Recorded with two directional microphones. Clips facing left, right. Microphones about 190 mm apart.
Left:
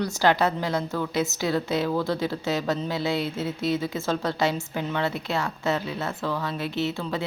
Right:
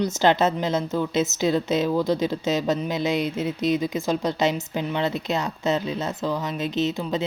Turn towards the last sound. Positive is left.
turn(degrees=-20)  # may be behind; listen again after turning